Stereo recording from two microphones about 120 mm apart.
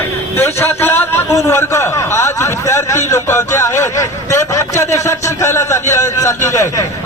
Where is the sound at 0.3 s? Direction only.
20° left (ahead or behind).